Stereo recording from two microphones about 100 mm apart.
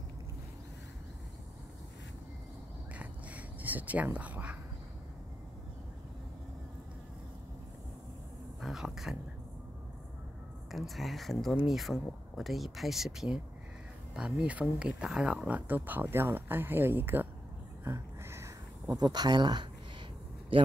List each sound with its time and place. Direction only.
2.9 s a sound: 15° right (ahead or behind)
8.5 s speech: centre (ahead or behind)
10.7 s speech: centre (ahead or behind); by 17.3 s 20° right (ahead or behind)
17.8 s a sound: 25° right (ahead or behind)
18.9 s speech: 45° right (ahead or behind)
20.5 s a man's voice: 60° right (ahead or behind)